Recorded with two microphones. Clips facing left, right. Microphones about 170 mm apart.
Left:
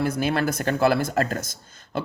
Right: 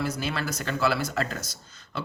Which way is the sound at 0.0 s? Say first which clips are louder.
Left 7 dB; 55° left (ahead or behind).